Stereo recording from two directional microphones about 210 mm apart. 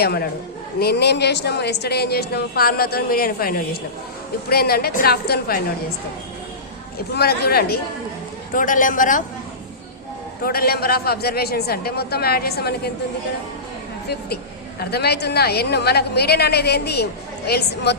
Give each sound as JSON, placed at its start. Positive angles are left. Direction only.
{"t": 0.0, "sound": "speech", "side_deg": 50}
{"t": 7.1, "sound": "a man's voice", "side_deg": 50}
{"t": 10.4, "sound": "speech", "side_deg": 45}
{"t": 14.8, "sound": "speech", "side_deg": 50}